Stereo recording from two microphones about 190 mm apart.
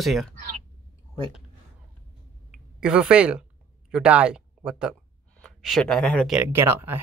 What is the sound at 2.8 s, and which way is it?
Speech, 5° right (ahead or behind).